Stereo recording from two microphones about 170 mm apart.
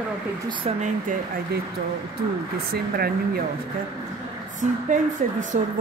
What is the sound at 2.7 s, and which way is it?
Speech, 65° right (ahead or behind).